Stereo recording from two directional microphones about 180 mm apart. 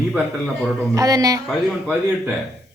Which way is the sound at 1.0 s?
20° right (ahead or behind).